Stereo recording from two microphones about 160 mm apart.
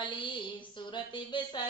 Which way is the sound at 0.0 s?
30° left (ahead or behind).